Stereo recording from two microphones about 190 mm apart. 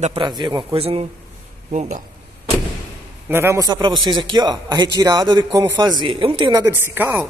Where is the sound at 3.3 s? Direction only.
15° right (ahead or behind).